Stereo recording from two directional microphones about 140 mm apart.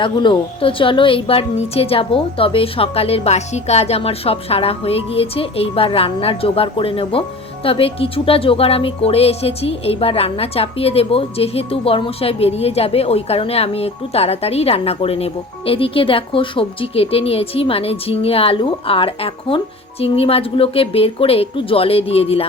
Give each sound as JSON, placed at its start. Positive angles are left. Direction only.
{"t": 0.0, "sound": "a woman's voice", "side_deg": 35}